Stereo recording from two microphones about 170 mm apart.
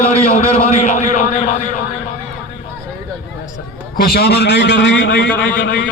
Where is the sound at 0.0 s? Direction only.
35° left (ahead or behind).